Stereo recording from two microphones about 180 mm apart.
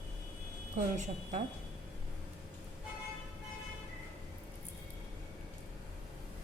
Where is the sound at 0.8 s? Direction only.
40° right (ahead or behind).